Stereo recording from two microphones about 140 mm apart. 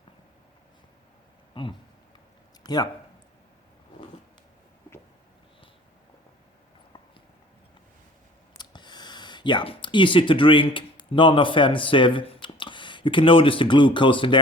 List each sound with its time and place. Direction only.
1.6 s speech: 35° left (ahead or behind)
8.5 s speech: 30° left (ahead or behind)